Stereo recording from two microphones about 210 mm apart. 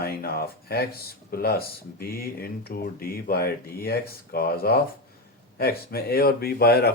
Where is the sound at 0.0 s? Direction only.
45° left (ahead or behind).